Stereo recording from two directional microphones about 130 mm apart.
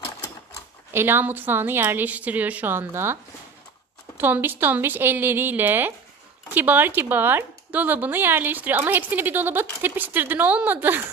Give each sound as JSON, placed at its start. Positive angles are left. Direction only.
{"t": 0.9, "sound": "speech", "side_deg": -15}
{"t": 4.2, "sound": "speech", "side_deg": -15}